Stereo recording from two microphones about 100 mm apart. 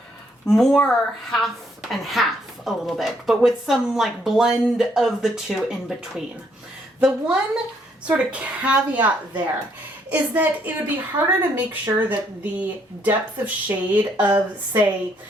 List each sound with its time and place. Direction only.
0.4 s a woman's voice: 5° left (ahead or behind); by 14.4 s 15° right (ahead or behind)